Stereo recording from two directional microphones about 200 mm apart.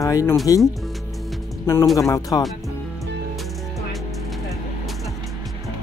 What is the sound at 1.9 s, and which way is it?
Speech, 15° left (ahead or behind).